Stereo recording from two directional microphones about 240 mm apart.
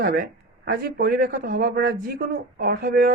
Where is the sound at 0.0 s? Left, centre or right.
Right.